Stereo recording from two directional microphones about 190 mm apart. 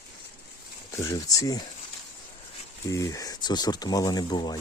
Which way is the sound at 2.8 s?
15° left (ahead or behind).